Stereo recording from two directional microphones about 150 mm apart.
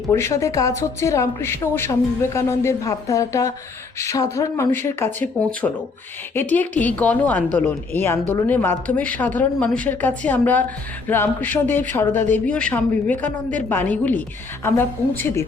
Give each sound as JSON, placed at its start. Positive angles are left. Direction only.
{"t": 0.1, "sound": "a woman's voice", "side_deg": 20}